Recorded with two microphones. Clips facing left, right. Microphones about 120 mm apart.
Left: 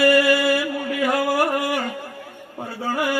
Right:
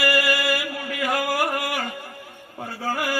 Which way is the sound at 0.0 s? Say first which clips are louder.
Left 6 dB; 25° left (ahead or behind).